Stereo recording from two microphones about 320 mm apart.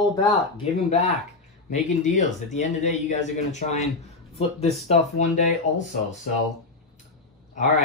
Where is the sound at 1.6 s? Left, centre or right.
Left.